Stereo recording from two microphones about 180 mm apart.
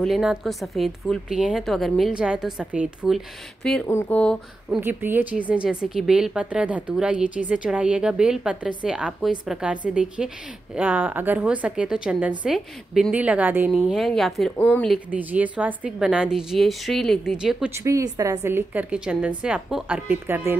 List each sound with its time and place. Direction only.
0.0 s a woman's voice: centre (ahead or behind)
3.8 s speech: 10° left (ahead or behind)
4.6 s a woman's voice: 10° right (ahead or behind); by 15.0 s 10° left (ahead or behind)
15.0 s a woman's voice: 10° right (ahead or behind)
17.7 s a woman's voice: 15° right (ahead or behind)